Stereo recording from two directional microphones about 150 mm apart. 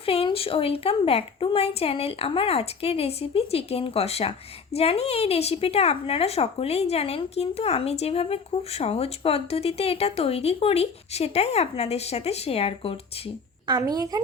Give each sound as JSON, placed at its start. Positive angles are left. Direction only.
{"t": 0.0, "sound": "a woman's voice", "side_deg": 40}
{"t": 13.7, "sound": "speech", "side_deg": -25}